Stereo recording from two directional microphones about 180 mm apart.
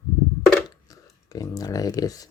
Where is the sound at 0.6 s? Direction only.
20° left (ahead or behind).